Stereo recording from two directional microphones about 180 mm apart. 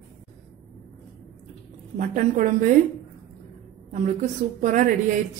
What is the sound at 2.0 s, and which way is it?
Speech, 45° right (ahead or behind).